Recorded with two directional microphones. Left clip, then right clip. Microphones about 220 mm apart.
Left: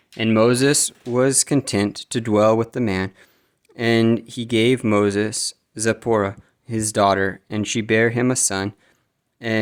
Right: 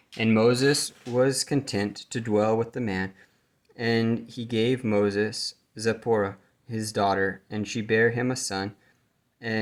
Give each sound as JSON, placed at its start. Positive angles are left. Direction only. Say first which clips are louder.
{"t": 0.1, "sound": "speech", "louder": "left 5 dB", "side_deg": 35}